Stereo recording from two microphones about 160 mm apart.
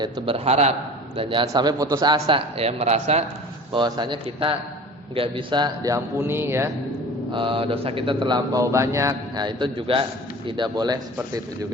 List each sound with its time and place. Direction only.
0.0 s a man's voice: 35° right (ahead or behind)
3.7 s a man's voice: 30° right (ahead or behind)
7.3 s speech: 35° right (ahead or behind)